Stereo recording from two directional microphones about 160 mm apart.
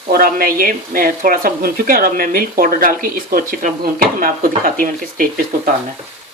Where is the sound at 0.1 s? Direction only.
65° right (ahead or behind).